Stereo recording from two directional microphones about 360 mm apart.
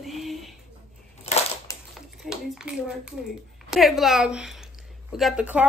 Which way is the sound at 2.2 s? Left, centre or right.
Centre.